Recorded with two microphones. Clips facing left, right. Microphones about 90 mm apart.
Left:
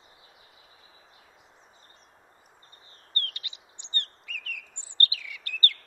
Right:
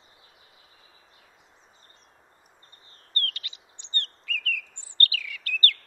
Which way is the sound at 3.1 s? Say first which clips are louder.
Right 3 dB; 20° left (ahead or behind).